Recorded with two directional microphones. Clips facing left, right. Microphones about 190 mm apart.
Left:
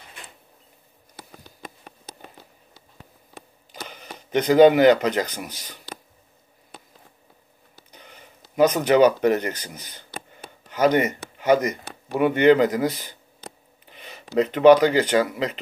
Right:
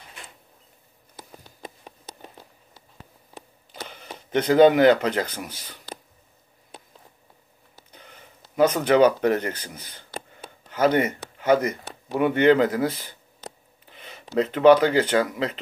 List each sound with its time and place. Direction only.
4.3 s speech: 10° left (ahead or behind)
7.9 s speech: 10° left (ahead or behind)
13.8 s a sound: 10° left (ahead or behind)
14.3 s speech: 10° left (ahead or behind)